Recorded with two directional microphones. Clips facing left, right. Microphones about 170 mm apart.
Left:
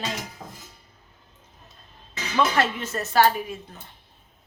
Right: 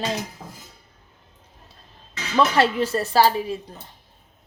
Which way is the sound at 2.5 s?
35° right (ahead or behind).